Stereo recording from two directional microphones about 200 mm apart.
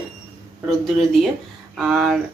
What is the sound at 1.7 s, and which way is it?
Speech, centre (ahead or behind).